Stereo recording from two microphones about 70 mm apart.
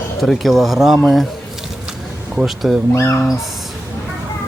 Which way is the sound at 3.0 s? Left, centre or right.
Left.